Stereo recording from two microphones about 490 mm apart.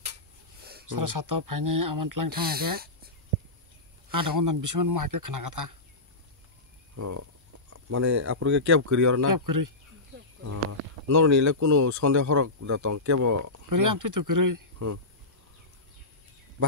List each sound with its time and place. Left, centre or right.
0.8 s speech: right
4.1 s speech: right
7.0 s speech: right
8.6 s speech: right
11.1 s speech: right